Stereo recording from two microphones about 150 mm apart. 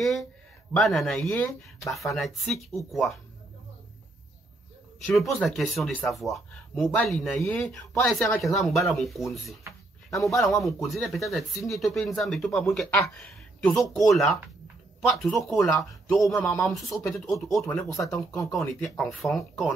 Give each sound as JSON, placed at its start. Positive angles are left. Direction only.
{"t": 0.7, "sound": "speech", "side_deg": 0}
{"t": 1.9, "sound": "speech", "side_deg": 0}
{"t": 5.0, "sound": "speech", "side_deg": 0}
{"t": 8.1, "sound": "speech", "side_deg": 0}
{"t": 18.1, "sound": "speech", "side_deg": 20}
{"t": 18.5, "sound": "speech", "side_deg": 5}